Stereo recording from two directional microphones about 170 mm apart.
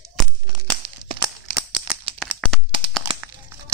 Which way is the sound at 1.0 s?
25° right (ahead or behind).